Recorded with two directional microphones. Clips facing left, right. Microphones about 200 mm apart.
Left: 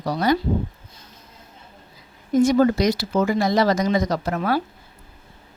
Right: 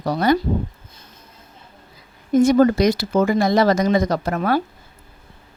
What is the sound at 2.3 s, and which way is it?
A woman's voice, 50° right (ahead or behind).